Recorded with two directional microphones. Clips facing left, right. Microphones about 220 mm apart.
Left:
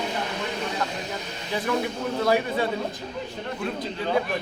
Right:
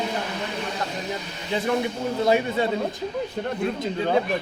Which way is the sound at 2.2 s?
20° right (ahead or behind).